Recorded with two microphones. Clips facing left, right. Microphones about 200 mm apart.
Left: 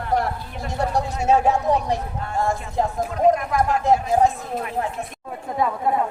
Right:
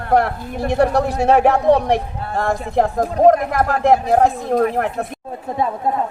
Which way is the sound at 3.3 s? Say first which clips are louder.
Right 4 dB; 65° right (ahead or behind).